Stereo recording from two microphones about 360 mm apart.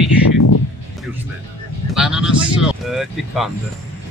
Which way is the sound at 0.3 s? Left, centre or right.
Left.